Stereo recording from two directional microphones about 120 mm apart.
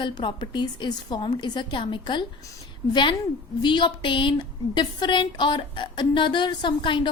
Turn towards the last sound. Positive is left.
turn(degrees=40)  # may be behind; listen again after turning